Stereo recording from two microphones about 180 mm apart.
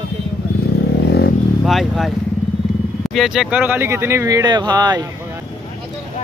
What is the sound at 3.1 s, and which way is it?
Speech, centre (ahead or behind).